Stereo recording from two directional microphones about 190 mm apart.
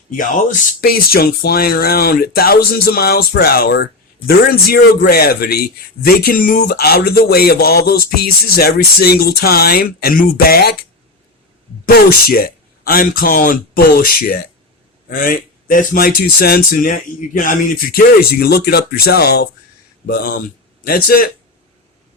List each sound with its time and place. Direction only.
0.2 s speech: 45° left (ahead or behind)
11.9 s speech: 50° left (ahead or behind)